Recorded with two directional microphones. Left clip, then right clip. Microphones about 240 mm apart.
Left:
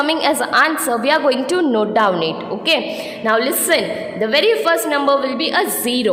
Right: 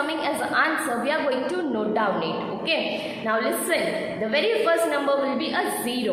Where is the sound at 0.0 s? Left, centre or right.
Left.